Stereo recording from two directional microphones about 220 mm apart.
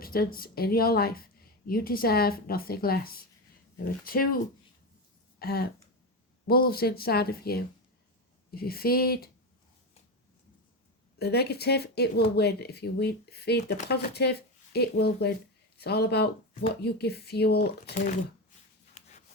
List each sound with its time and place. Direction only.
0.0 s speech: 45° left (ahead or behind)
5.4 s speech: 45° left (ahead or behind)
11.2 s speech: 45° left (ahead or behind)
17.8 s speech: 35° left (ahead or behind)
18.9 s writing: 30° left (ahead or behind)